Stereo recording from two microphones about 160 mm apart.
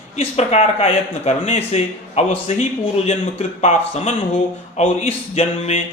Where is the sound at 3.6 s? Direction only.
40° left (ahead or behind).